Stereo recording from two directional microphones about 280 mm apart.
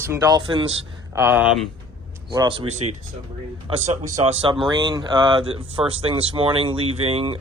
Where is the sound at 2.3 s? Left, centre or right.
Centre.